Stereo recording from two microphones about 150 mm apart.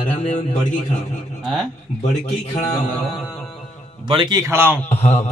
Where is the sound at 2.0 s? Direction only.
50° left (ahead or behind).